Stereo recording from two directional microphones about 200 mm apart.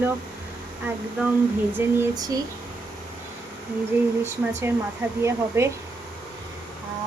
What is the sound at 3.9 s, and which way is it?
A woman's voice, 10° right (ahead or behind).